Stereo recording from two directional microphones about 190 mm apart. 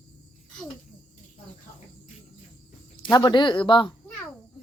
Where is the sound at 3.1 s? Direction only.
25° left (ahead or behind).